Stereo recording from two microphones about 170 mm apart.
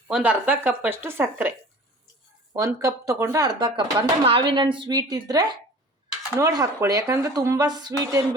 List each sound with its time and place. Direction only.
0.1 s speech: 10° right (ahead or behind)
3.6 s speech: 30° right (ahead or behind)